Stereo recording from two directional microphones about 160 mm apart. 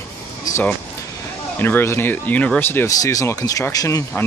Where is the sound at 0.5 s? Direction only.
15° left (ahead or behind).